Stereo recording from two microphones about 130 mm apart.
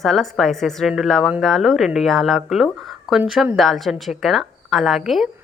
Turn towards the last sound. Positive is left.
turn(degrees=0)  # may be behind; listen again after turning